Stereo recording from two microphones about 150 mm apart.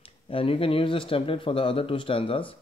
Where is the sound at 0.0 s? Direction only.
35° left (ahead or behind).